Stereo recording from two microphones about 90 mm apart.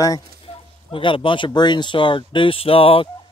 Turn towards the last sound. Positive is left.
turn(degrees=90)